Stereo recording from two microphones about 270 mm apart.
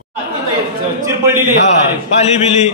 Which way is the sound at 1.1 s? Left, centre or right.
Centre.